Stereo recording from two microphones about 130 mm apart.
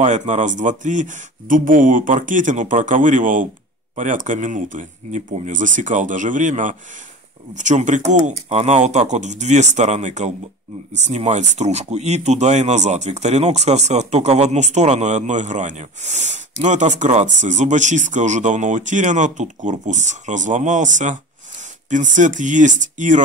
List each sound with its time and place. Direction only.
0.0 s speech: 65° right (ahead or behind)